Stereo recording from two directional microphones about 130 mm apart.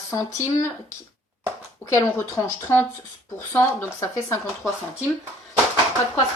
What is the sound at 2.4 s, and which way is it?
A woman's voice, 20° left (ahead or behind).